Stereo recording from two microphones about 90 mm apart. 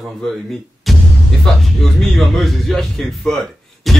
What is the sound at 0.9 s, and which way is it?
Music, centre (ahead or behind).